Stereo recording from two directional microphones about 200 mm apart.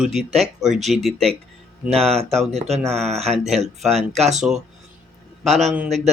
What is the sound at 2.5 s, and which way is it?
Speech, 35° right (ahead or behind).